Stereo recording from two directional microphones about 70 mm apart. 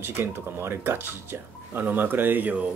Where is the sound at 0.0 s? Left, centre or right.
Right.